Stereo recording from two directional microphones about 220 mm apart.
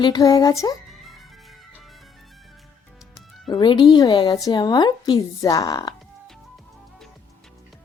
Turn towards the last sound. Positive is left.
turn(degrees=15)  # may be behind; listen again after turning